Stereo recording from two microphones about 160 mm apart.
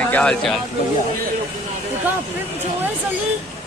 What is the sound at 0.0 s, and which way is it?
Speech, 10° left (ahead or behind).